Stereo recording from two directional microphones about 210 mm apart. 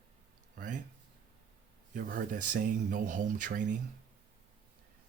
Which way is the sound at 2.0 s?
40° right (ahead or behind).